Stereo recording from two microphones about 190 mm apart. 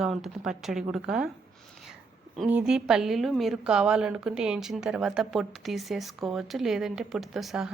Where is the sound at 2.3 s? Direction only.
5° right (ahead or behind).